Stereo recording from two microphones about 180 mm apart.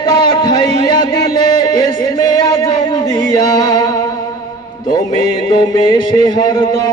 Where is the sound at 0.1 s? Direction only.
25° left (ahead or behind).